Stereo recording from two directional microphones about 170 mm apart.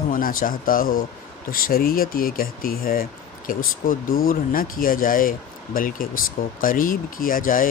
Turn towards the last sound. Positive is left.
turn(degrees=55)  # may be behind; listen again after turning